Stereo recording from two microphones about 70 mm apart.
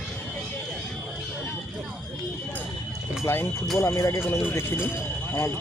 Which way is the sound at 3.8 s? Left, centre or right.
Left.